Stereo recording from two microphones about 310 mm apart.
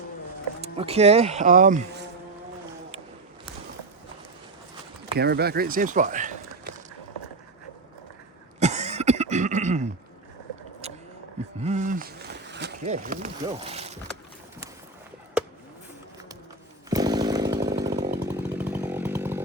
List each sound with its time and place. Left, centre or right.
0.6 s insect: centre
5.1 s speech: right
8.5 s cough: right
11.6 s a sound: right
12.8 s speech: right
16.9 s chainsaw: centre